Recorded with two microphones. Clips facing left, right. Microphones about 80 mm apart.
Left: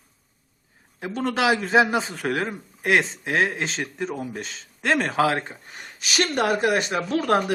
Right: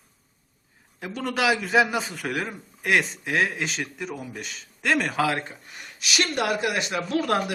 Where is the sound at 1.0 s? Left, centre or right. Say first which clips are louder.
Left 3 dB; left.